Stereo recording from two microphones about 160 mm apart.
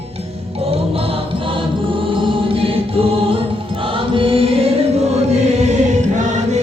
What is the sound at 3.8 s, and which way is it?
Choir, 35° right (ahead or behind).